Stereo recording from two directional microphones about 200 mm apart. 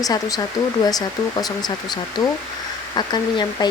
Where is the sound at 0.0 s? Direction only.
20° left (ahead or behind).